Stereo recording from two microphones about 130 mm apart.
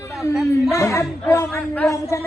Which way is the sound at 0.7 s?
20° left (ahead or behind).